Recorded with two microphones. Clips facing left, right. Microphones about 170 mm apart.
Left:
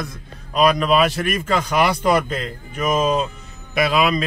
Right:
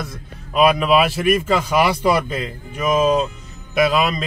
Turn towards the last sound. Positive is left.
turn(degrees=0)  # may be behind; listen again after turning